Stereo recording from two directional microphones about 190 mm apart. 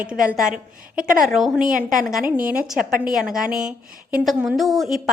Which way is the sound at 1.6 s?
45° right (ahead or behind).